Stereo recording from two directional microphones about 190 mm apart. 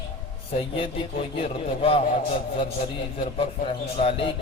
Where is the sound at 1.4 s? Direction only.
30° left (ahead or behind).